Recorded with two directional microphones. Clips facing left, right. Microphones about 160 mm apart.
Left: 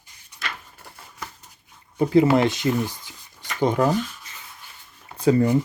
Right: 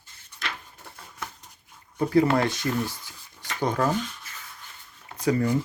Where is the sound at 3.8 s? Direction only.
5° left (ahead or behind).